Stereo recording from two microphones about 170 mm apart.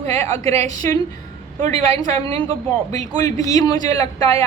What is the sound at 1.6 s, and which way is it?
A woman's voice, 40° right (ahead or behind).